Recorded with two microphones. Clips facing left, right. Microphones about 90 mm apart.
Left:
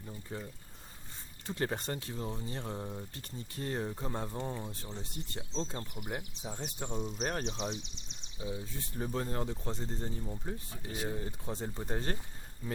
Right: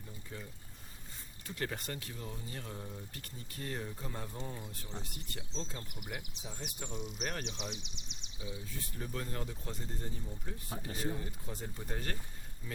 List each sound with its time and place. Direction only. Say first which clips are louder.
0.1 s speech: left 5 dB; 30° left (ahead or behind)
1.5 s speech: left 5 dB; 30° left (ahead or behind)
10.7 s speech: right 3 dB; 35° right (ahead or behind)
11.2 s speech: left 5 dB; 30° left (ahead or behind)